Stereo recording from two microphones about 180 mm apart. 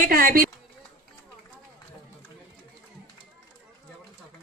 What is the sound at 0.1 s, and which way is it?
Speech, 50° right (ahead or behind).